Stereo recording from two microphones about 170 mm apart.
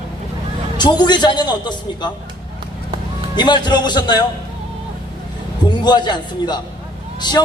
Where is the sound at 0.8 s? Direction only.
25° left (ahead or behind).